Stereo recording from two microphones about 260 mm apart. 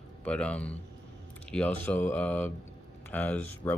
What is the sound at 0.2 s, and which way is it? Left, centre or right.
Speech, centre.